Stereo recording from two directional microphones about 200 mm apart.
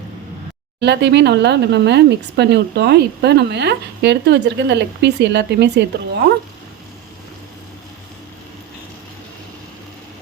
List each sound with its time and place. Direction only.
0.8 s speech: 60° right (ahead or behind)